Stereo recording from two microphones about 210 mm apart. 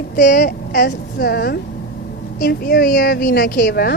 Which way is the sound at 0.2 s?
40° left (ahead or behind).